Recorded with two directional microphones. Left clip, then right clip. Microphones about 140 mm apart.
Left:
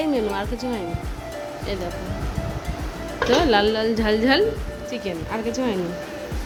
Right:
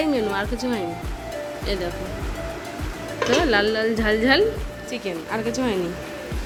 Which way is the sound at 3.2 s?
20° left (ahead or behind).